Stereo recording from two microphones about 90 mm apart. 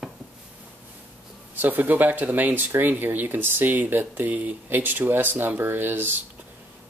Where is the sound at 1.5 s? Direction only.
20° right (ahead or behind).